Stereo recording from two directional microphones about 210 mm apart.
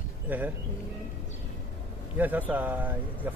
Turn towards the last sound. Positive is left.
turn(degrees=-10)  # may be behind; listen again after turning